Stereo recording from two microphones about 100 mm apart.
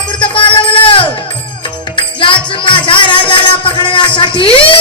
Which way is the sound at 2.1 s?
55° left (ahead or behind).